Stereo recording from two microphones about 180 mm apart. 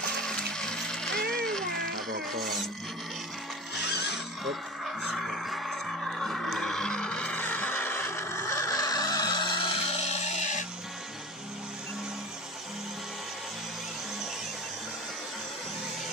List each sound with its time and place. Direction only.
0.2 s a sound: 5° left (ahead or behind)
1.3 s music: 5° left (ahead or behind)
2.0 s music: 55° right (ahead or behind)
2.4 s speech: centre (ahead or behind)
4.5 s music: centre (ahead or behind); by 10.6 s 40° left (ahead or behind)